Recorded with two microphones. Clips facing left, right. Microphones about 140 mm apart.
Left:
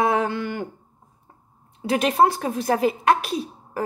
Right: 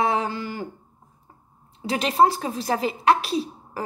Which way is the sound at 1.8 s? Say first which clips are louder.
Left 1 dB; 50° left (ahead or behind).